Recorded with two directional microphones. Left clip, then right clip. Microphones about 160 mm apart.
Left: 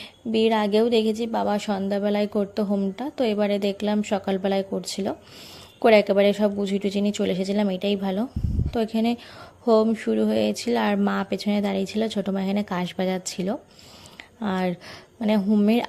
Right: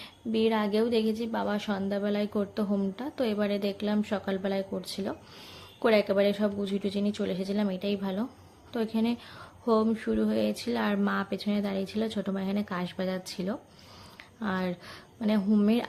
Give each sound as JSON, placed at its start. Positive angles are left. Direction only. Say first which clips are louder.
{"t": 0.3, "sound": "a woman's voice", "louder": "left 6 dB", "side_deg": 35}